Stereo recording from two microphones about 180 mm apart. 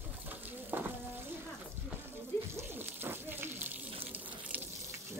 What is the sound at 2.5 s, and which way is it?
Water, 10° right (ahead or behind).